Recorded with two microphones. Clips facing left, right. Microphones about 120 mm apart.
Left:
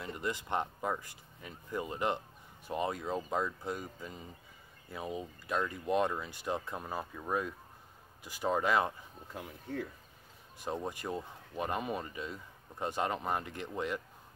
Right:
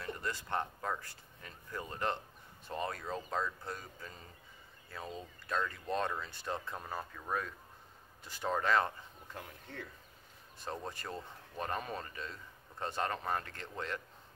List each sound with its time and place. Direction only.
0.0 s speech: 15° left (ahead or behind)